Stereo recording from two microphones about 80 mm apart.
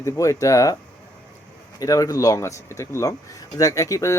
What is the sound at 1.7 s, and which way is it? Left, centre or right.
Speech, left.